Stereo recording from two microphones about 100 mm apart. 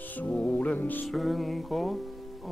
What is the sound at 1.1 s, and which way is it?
Music, centre (ahead or behind).